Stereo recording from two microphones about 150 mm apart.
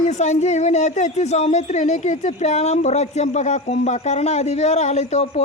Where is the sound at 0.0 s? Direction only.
50° left (ahead or behind).